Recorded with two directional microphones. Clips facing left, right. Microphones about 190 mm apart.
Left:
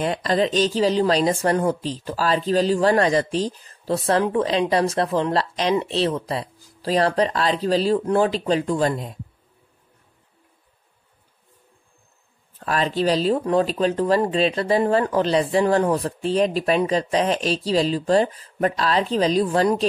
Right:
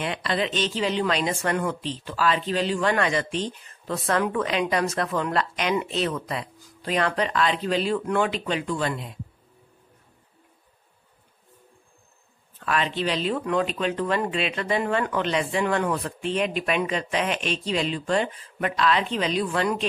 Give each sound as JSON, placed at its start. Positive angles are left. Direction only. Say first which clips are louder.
{"t": 0.0, "sound": "speech", "louder": "left 6 dB", "side_deg": 40}
{"t": 12.5, "sound": "speech", "louder": "left 4 dB", "side_deg": 40}